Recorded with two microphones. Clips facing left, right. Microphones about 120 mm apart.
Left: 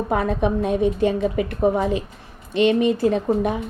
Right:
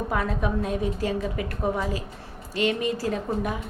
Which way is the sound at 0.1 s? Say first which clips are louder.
Left 7 dB; 25° left (ahead or behind).